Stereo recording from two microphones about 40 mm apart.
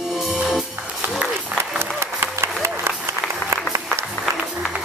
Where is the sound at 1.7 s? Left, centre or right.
Right.